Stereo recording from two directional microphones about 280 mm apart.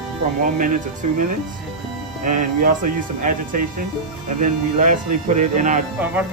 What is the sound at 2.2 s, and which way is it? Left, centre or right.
Speech, right.